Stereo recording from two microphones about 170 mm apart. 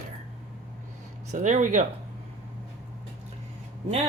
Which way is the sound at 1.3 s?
45° right (ahead or behind).